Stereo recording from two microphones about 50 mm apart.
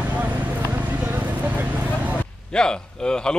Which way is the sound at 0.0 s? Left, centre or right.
Right.